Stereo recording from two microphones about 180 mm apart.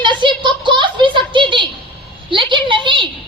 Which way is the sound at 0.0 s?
25° right (ahead or behind).